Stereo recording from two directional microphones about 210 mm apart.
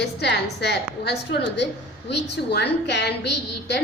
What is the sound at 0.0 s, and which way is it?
A woman's voice, 55° left (ahead or behind).